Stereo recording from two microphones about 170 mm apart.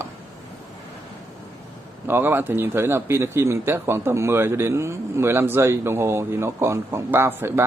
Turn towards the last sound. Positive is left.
turn(degrees=-15)  # may be behind; listen again after turning